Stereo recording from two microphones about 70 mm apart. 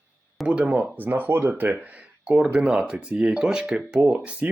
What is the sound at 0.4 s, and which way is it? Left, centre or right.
Speech, centre.